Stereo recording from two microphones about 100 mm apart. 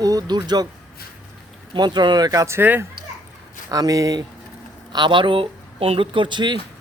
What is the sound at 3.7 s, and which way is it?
Speech, 35° right (ahead or behind).